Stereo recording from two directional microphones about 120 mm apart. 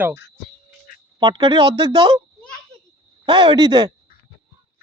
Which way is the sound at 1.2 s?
40° right (ahead or behind).